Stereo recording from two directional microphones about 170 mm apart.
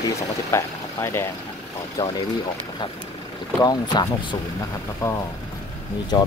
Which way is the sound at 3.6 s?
25° left (ahead or behind).